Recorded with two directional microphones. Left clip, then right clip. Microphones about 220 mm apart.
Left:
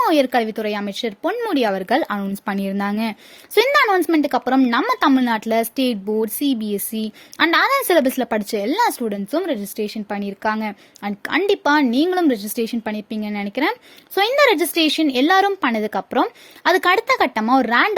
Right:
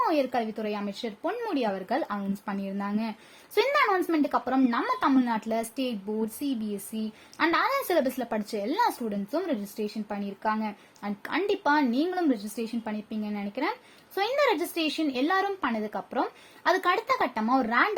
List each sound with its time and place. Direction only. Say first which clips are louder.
0.0 s speech: left 9 dB; 35° left (ahead or behind)